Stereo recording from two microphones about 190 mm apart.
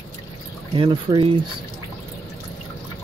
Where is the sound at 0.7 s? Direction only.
25° right (ahead or behind).